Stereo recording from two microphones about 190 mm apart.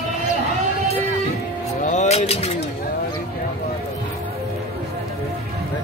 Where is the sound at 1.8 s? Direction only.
40° left (ahead or behind).